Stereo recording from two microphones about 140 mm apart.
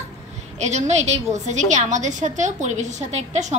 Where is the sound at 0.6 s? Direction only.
55° right (ahead or behind).